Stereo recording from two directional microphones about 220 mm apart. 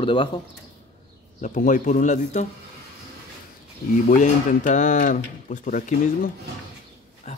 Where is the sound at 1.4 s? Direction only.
35° left (ahead or behind).